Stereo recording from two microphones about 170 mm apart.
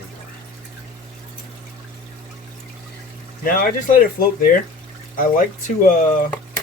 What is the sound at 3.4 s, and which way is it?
Speech, 55° left (ahead or behind).